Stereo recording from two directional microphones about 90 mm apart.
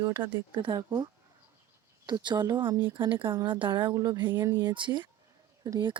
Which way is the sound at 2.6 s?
25° right (ahead or behind).